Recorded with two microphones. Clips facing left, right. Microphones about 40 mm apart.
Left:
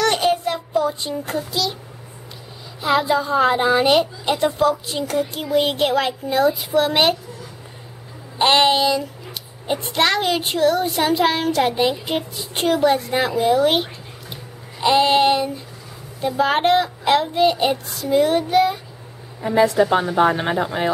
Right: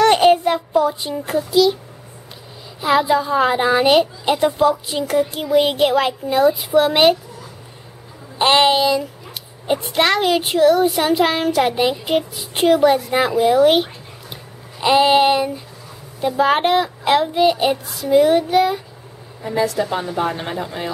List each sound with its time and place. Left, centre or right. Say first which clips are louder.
0.0 s child singing: right 6 dB; right
0.7 s a woman's voice: right 3 dB; centre
2.8 s a woman's voice: right 2 dB; centre
8.4 s speech: right 1 dB; centre
14.3 s a sound: even; centre
16.2 s speech: right 2 dB; centre
19.5 s a woman's voice: left 4 dB; left